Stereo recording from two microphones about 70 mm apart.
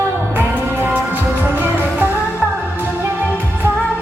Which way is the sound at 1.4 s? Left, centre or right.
Right.